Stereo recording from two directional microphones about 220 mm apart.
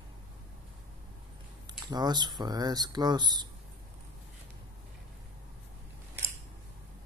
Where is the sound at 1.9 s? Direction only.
20° right (ahead or behind).